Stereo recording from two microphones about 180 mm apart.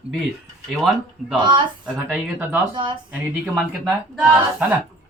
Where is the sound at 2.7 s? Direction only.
25° right (ahead or behind).